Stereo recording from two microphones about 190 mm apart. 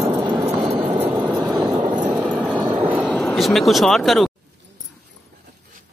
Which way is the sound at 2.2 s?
5° left (ahead or behind).